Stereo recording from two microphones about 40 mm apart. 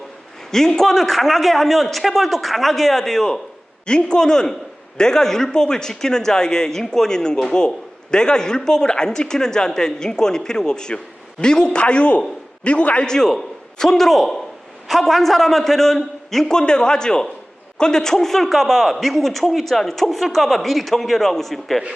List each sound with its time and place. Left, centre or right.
0.5 s a man's voice: centre; by 13.1 s left
13.1 s a man's voice: centre